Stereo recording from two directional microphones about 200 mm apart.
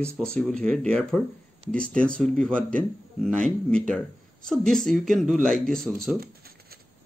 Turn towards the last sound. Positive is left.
turn(degrees=5)  # may be behind; listen again after turning